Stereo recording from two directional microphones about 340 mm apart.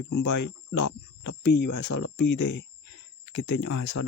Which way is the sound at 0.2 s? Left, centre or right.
Left.